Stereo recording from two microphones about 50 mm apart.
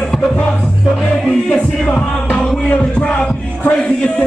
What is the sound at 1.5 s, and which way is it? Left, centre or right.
Music, centre.